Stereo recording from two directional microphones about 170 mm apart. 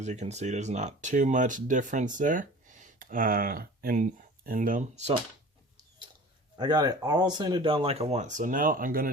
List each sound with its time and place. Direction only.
0.0 s speech: 40° right (ahead or behind)
6.6 s speech: 25° right (ahead or behind); by 9.1 s 60° right (ahead or behind)